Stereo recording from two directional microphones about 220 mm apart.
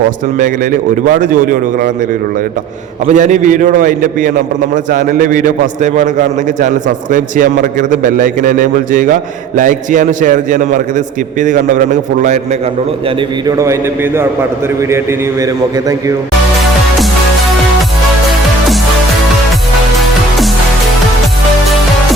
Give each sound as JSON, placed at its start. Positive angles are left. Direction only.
{"t": 0.3, "sound": "a man's voice", "side_deg": -35}
{"t": 3.1, "sound": "a man's voice", "side_deg": -35}
{"t": 13.1, "sound": "a man's voice", "side_deg": -20}